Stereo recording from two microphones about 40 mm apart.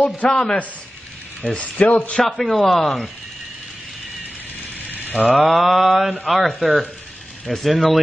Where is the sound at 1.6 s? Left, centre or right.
Left.